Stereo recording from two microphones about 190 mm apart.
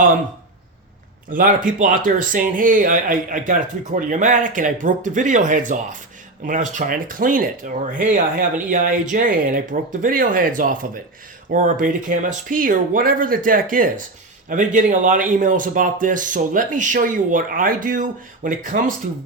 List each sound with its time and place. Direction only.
1.6 s speech: 45° right (ahead or behind)